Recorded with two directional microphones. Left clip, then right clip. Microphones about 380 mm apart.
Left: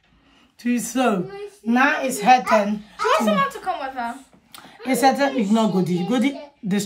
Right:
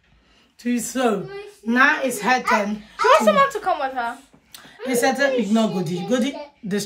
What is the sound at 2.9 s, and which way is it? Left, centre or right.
A woman's voice, centre.